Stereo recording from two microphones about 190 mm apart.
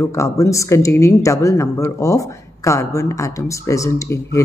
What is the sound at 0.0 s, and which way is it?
A woman's voice, 15° left (ahead or behind).